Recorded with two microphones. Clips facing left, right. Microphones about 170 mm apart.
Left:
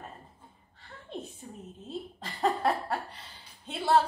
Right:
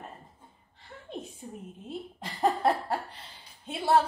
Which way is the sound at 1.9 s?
20° right (ahead or behind).